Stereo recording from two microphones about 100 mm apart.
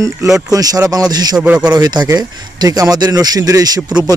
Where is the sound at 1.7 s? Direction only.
45° right (ahead or behind).